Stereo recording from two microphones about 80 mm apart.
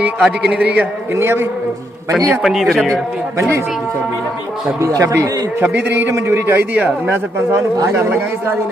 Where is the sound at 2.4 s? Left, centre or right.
Centre.